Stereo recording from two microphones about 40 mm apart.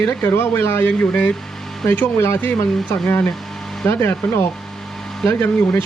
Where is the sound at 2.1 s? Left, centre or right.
Left.